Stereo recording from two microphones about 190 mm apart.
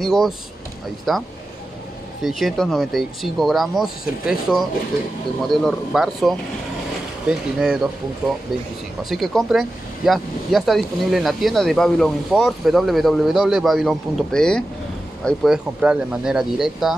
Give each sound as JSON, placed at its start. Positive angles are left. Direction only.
{"t": 0.0, "sound": "speech", "side_deg": 0}
{"t": 2.2, "sound": "speech", "side_deg": 0}
{"t": 9.1, "sound": "speech", "side_deg": 0}